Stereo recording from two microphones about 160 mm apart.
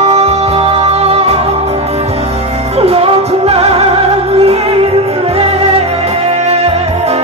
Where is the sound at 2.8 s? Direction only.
35° right (ahead or behind).